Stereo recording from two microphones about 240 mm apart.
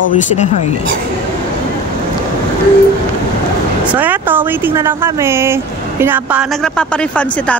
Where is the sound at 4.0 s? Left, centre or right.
Centre.